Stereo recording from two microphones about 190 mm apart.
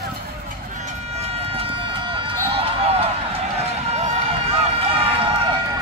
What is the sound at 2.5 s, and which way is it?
Run, 30° right (ahead or behind).